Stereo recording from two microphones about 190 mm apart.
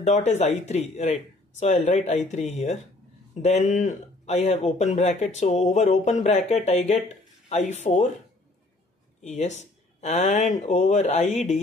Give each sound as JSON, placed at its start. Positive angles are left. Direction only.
{"t": 0.0, "sound": "speech", "side_deg": 35}
{"t": 9.2, "sound": "speech", "side_deg": 40}